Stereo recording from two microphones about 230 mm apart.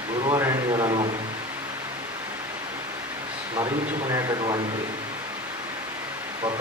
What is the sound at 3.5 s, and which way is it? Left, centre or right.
Speech, centre.